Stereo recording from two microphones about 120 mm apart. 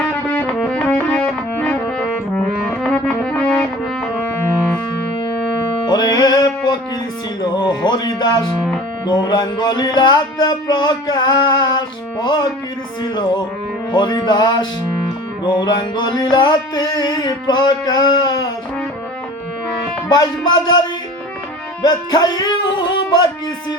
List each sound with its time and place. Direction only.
0.0 s music: 10° left (ahead or behind)
2.8 s music: 5° left (ahead or behind)
5.8 s music: 35° left (ahead or behind)
7.4 s a sound: 40° left (ahead or behind)
9.0 s music: 35° left (ahead or behind)
20.1 s music: 35° left (ahead or behind)
21.8 s music: 35° left (ahead or behind)